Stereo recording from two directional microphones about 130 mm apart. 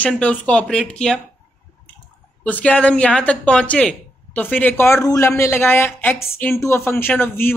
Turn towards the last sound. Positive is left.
turn(degrees=15)  # may be behind; listen again after turning